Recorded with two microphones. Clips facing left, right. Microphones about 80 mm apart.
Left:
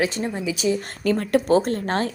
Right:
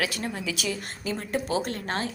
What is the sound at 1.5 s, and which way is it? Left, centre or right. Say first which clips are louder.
Speech: left 9 dB; left.